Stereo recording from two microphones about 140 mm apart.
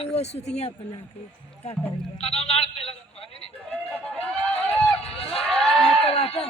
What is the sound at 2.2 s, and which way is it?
Speech, 45° left (ahead or behind).